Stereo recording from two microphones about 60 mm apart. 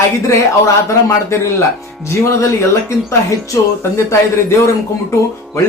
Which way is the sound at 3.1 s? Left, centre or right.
Left.